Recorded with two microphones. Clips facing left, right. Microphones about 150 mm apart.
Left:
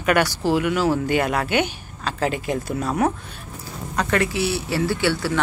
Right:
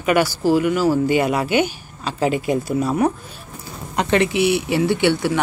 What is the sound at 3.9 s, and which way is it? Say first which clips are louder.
Speech: right 4 dB; 20° right (ahead or behind).